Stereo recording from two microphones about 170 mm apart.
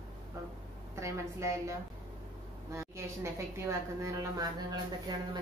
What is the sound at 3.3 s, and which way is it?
A woman's voice, 15° right (ahead or behind).